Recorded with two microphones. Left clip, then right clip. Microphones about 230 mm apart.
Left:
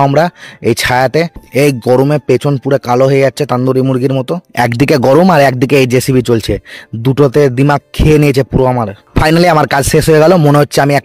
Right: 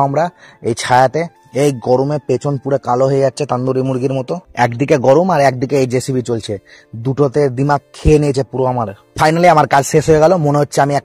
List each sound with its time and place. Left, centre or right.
0.1 s speech: left